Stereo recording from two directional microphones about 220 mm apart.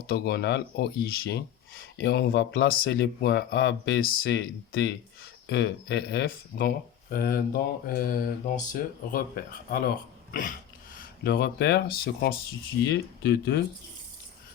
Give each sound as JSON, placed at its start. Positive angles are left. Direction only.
{"t": 0.1, "sound": "speech", "side_deg": 45}
{"t": 10.9, "sound": "speech", "side_deg": 45}